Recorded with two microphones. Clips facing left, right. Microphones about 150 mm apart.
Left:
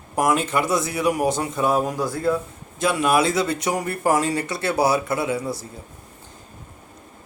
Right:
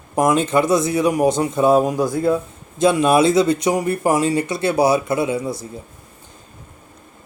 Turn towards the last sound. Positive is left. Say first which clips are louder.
# right 4 dB
turn(degrees=-20)  # may be behind; listen again after turning